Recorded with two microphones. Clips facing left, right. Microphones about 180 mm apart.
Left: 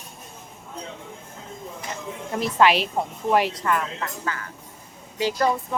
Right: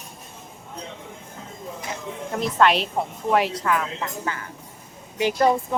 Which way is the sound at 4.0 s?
20° right (ahead or behind).